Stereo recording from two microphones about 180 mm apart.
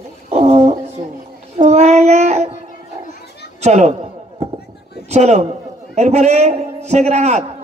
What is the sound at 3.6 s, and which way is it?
A man's voice, 40° right (ahead or behind).